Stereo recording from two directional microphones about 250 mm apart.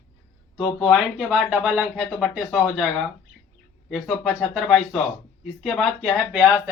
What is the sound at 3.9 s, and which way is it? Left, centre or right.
Speech, centre.